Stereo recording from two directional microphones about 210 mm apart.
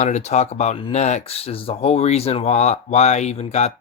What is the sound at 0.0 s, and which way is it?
Speech, 35° left (ahead or behind).